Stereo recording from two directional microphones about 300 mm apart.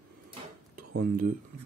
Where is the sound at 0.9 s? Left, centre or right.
Right.